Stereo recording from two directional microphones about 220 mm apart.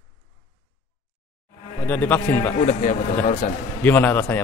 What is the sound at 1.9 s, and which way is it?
Speech, 10° left (ahead or behind).